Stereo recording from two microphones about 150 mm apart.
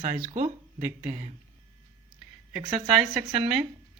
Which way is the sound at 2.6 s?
30° right (ahead or behind).